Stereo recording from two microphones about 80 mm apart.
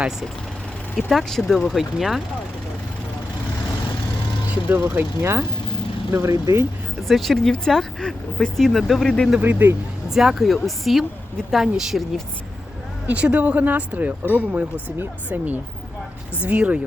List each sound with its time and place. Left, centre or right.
0.9 s speech: centre
4.9 s speech: right
7.1 s speech: centre
9.4 s speech: right
10.1 s speech: centre
13.1 s speech: centre